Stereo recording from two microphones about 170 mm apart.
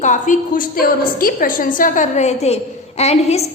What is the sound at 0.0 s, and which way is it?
A woman's voice, 50° left (ahead or behind).